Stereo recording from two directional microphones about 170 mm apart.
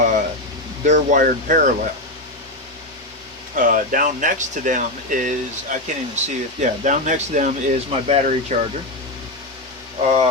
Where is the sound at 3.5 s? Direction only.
55° right (ahead or behind).